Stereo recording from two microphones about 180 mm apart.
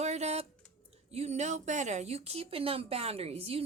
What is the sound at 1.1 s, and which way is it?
A woman's voice, 35° right (ahead or behind).